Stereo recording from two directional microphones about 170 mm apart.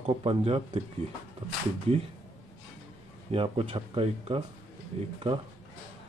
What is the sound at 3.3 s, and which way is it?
Speech, 35° right (ahead or behind).